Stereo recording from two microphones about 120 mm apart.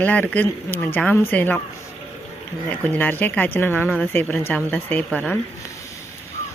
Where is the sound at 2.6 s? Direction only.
15° left (ahead or behind).